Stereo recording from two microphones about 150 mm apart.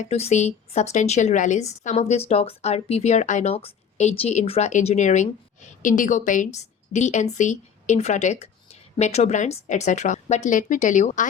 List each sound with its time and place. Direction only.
0.0 s a woman's voice: 45° left (ahead or behind)